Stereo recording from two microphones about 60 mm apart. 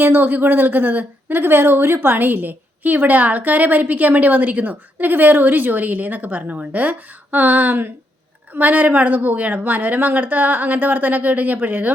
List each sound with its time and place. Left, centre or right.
0.0 s a woman's voice: right